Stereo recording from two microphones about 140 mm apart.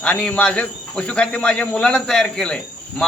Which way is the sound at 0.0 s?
10° left (ahead or behind).